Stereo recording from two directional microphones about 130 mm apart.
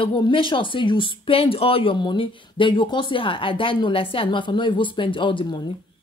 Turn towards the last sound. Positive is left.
turn(degrees=40)  # may be behind; listen again after turning